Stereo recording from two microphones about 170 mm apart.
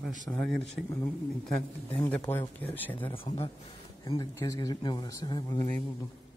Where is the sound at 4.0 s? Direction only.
20° left (ahead or behind).